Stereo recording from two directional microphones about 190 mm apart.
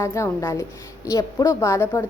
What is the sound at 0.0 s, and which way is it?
A woman's voice, 15° left (ahead or behind).